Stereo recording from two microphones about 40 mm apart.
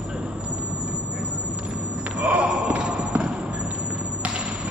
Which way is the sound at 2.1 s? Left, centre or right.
Right.